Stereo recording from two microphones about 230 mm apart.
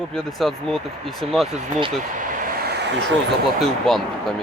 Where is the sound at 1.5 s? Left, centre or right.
Right.